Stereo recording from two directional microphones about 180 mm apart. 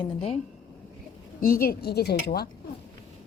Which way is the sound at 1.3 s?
55° left (ahead or behind).